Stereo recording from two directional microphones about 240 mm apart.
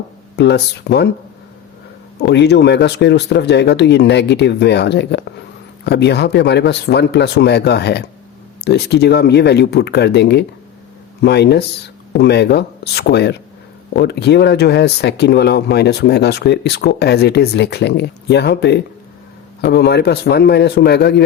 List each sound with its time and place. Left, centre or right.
0.3 s speech: left
2.1 s speech: left